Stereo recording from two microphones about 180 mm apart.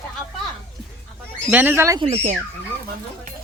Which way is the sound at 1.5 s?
10° right (ahead or behind).